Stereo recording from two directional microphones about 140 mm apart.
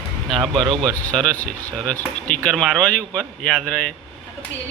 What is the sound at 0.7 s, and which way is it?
Speech, 5° left (ahead or behind).